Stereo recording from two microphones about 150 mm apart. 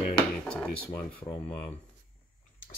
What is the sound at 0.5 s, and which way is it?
Speech, 10° left (ahead or behind).